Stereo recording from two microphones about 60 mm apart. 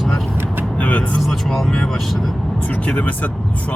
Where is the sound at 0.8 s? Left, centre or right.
Left.